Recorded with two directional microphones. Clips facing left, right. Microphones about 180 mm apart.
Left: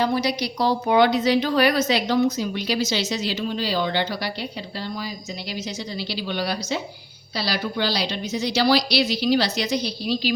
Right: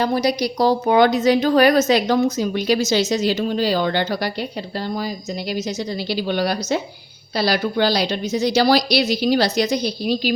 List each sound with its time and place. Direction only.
0.0 s a woman's voice: 45° right (ahead or behind)
5.5 s a woman's voice: 45° right (ahead or behind)